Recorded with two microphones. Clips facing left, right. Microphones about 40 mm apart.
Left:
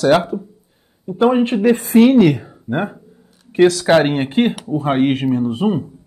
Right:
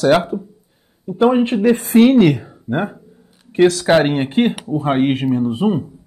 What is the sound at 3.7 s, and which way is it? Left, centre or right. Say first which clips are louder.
Speech: left 1 dB; centre.